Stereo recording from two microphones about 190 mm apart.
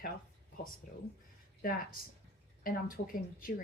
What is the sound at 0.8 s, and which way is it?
Speech, 45° left (ahead or behind).